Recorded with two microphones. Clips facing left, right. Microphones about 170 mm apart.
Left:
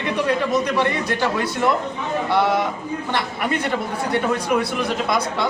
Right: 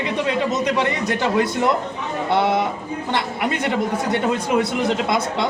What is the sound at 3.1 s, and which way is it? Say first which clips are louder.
Speech: right 1 dB; 20° right (ahead or behind).